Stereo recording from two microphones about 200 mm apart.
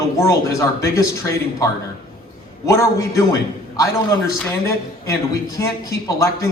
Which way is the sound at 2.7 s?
15° left (ahead or behind).